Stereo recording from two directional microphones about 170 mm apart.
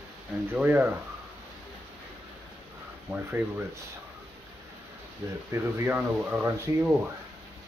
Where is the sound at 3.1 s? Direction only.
10° right (ahead or behind).